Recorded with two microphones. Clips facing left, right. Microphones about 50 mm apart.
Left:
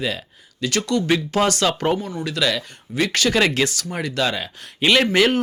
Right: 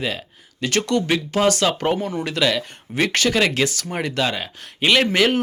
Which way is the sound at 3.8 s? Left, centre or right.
Right.